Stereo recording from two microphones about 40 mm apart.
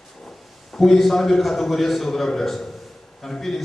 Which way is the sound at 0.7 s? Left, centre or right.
Centre.